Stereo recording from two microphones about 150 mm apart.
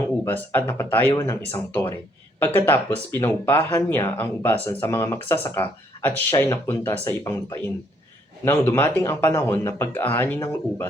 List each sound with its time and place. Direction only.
0.3 s speech: 10° left (ahead or behind)